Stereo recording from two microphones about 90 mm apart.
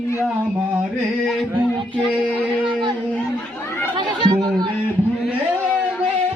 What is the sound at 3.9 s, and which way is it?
Chatter, 55° right (ahead or behind).